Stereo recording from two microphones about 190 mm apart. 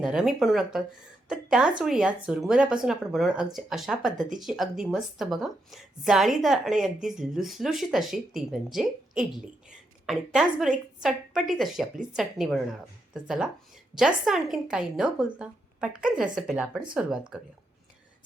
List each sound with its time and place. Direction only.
0.0 s a woman's voice: 5° right (ahead or behind)